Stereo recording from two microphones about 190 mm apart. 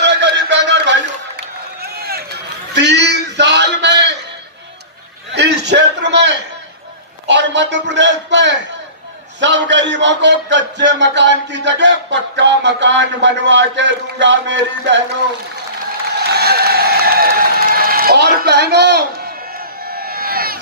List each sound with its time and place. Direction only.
0.0 s music: 65° right (ahead or behind)
1.4 s run: 55° right (ahead or behind)
2.7 s a sound: 65° right (ahead or behind)
5.3 s a sound: 65° right (ahead or behind)
7.3 s a man's voice: 70° right (ahead or behind)
16.1 s applause: 55° right (ahead or behind)